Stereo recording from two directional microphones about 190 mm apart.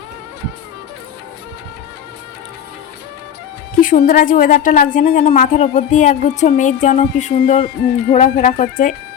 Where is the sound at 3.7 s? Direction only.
45° left (ahead or behind).